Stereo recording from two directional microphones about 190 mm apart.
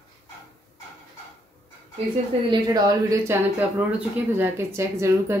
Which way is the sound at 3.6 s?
10° right (ahead or behind).